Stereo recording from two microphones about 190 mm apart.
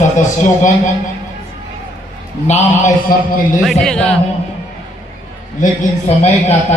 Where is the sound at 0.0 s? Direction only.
40° left (ahead or behind).